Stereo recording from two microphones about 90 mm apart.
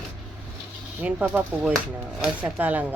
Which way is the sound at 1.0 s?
20° right (ahead or behind).